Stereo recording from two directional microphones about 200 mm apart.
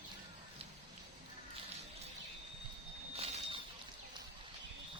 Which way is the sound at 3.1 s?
30° right (ahead or behind).